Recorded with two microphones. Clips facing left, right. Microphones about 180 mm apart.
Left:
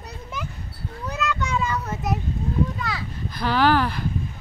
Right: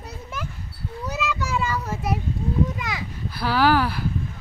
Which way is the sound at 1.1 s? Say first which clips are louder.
Left 1 dB; 5° right (ahead or behind).